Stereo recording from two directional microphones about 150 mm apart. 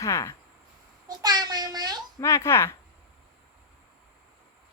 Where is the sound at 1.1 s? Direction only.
25° right (ahead or behind).